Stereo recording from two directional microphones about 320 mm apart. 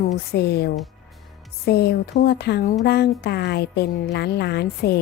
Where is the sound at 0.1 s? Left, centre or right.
Left.